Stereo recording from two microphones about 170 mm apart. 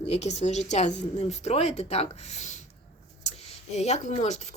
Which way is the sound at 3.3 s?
40° left (ahead or behind).